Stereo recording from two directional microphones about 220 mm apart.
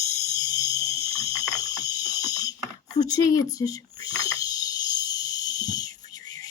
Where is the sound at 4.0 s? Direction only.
15° left (ahead or behind).